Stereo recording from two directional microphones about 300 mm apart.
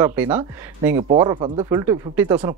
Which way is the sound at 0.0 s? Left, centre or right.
Centre.